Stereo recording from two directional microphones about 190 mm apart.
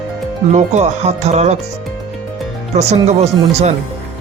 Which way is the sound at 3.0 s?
35° right (ahead or behind).